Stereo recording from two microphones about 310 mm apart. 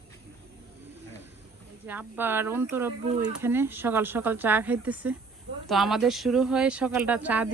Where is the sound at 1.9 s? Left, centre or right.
Centre.